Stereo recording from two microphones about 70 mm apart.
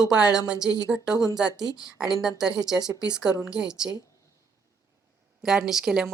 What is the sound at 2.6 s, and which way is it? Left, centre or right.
Speech, centre.